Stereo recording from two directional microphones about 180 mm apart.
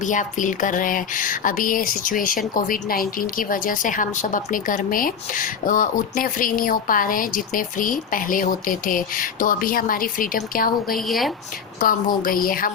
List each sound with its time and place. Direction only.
0.0 s a woman's voice: 45° left (ahead or behind)
10.9 s a woman's voice: centre (ahead or behind)
11.8 s a woman's voice: 50° left (ahead or behind)